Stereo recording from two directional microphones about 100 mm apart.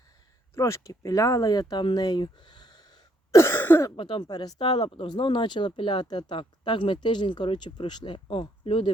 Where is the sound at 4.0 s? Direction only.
50° left (ahead or behind).